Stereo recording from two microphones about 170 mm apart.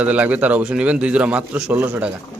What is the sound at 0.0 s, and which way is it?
A man's voice, 10° right (ahead or behind).